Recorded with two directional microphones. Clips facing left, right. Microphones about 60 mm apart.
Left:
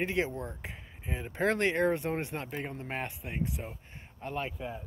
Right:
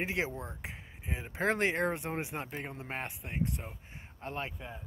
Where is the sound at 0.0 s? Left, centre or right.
Centre.